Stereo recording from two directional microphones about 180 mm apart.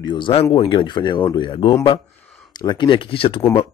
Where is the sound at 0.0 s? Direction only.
25° left (ahead or behind).